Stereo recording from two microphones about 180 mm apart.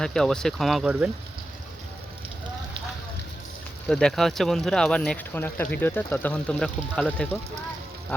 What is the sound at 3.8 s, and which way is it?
Speech, 5° left (ahead or behind).